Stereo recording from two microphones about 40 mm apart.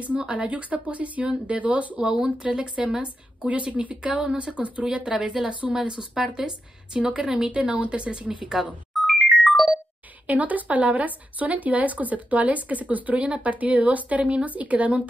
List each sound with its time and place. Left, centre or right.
0.0 s a woman's voice: right
4.8 s a woman's voice: centre
5.5 s speech: right
5.8 s a woman's voice: centre
8.9 s music: centre
10.2 s speech: right